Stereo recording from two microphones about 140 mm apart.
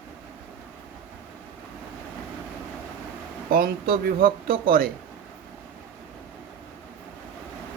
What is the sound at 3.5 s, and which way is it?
Speech, 90° right.